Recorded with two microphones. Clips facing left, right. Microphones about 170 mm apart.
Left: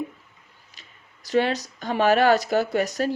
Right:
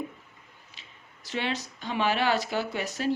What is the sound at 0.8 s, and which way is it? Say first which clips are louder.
Speech: even; 40° left (ahead or behind).